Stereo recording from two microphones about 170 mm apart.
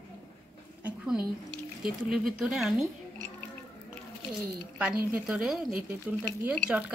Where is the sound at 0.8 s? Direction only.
10° right (ahead or behind).